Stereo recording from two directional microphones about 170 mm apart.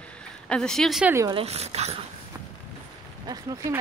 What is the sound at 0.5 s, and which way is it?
Speech, 5° left (ahead or behind).